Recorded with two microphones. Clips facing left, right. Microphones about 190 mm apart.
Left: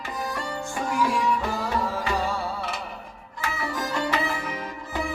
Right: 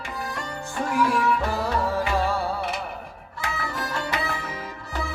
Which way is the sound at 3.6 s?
20° left (ahead or behind).